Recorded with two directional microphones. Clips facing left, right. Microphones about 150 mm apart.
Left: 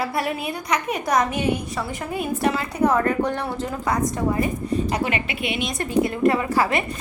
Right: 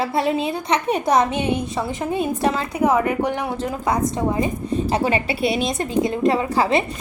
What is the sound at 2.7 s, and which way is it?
A woman's voice, 10° right (ahead or behind).